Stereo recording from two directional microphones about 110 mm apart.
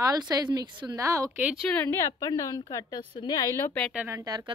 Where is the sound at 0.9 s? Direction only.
30° right (ahead or behind).